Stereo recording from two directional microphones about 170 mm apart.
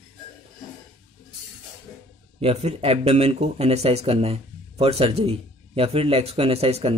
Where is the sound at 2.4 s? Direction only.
35° right (ahead or behind).